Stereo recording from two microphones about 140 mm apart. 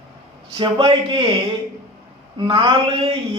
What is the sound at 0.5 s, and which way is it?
Speech, 35° right (ahead or behind).